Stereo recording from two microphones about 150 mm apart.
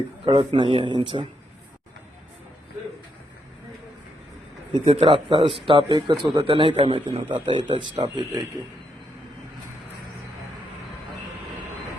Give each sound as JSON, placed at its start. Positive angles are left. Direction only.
{"t": 0.3, "sound": "speech", "side_deg": -35}
{"t": 4.7, "sound": "speech", "side_deg": -35}